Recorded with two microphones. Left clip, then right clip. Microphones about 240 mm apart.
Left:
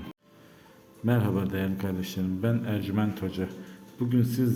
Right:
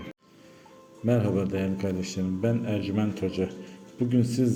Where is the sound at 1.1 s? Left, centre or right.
Centre.